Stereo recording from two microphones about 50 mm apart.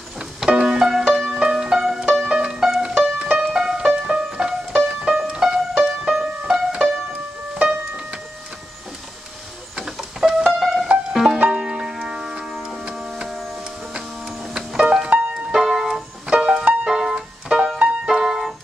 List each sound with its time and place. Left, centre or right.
0.2 s music: centre
2.0 s music: right
9.8 s printer: centre
10.6 s music: centre
11.3 s music: centre
13.9 s printer: centre
15.0 s music: right
15.5 s music: centre
18.2 s keyboard: centre